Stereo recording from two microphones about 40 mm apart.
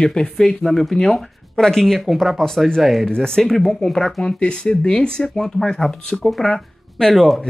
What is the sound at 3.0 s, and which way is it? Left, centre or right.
Speech, centre.